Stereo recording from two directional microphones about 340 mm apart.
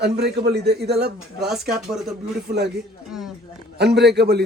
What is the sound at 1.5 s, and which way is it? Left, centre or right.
Speech, centre.